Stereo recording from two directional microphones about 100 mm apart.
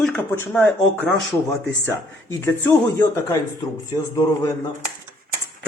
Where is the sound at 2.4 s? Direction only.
30° left (ahead or behind).